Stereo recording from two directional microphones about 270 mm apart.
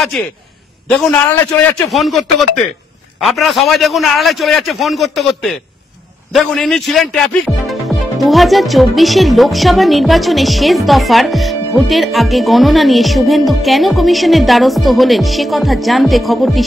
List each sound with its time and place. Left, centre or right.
0.1 s a man's voice: centre